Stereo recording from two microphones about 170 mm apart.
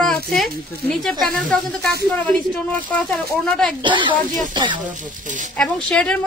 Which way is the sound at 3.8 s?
30° right (ahead or behind).